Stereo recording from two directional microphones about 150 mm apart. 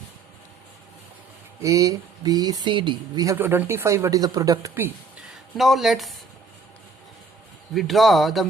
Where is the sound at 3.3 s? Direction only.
15° right (ahead or behind).